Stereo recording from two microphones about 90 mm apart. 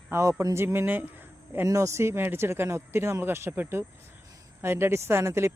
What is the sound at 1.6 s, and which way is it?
Speech, 35° right (ahead or behind).